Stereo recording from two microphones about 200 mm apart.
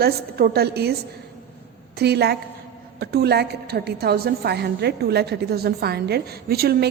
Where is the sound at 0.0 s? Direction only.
50° right (ahead or behind).